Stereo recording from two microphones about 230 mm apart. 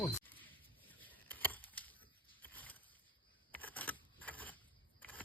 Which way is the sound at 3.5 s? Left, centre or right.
Centre.